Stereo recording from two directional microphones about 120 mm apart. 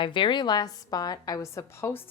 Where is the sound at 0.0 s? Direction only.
40° left (ahead or behind).